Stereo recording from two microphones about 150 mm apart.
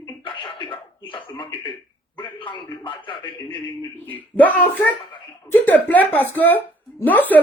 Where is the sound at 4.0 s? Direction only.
10° left (ahead or behind).